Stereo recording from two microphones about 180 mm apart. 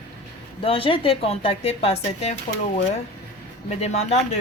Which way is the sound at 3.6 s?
40° left (ahead or behind).